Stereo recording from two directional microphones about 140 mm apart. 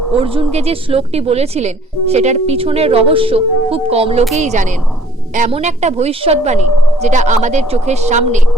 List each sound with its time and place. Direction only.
0.2 s a woman's voice: 40° right (ahead or behind)
4.4 s a woman's voice: 55° right (ahead or behind)